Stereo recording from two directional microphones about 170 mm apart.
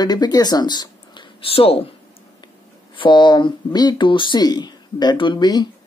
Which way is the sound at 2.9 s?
30° left (ahead or behind).